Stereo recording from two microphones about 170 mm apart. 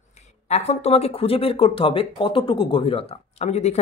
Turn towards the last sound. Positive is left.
turn(degrees=40)  # may be behind; listen again after turning